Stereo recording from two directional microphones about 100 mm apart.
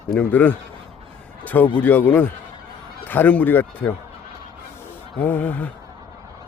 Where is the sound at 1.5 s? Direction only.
15° left (ahead or behind).